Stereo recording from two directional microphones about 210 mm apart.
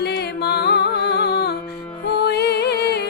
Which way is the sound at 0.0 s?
50° left (ahead or behind).